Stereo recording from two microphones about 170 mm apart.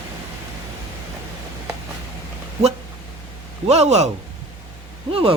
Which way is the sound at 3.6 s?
40° right (ahead or behind).